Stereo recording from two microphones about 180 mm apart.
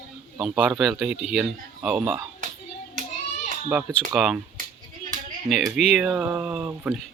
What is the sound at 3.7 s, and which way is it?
Speech, 5° right (ahead or behind).